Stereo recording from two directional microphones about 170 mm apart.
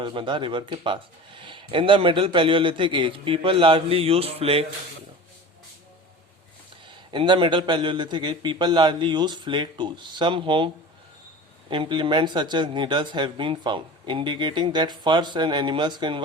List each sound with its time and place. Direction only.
0.0 s a man's voice: 30° right (ahead or behind)
6.8 s speech: 30° right (ahead or behind)
11.7 s speech: 30° right (ahead or behind)